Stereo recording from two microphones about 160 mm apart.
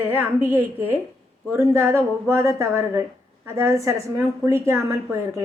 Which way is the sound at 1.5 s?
20° right (ahead or behind).